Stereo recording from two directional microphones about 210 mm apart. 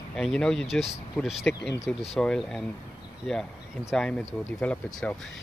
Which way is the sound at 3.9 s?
5° left (ahead or behind).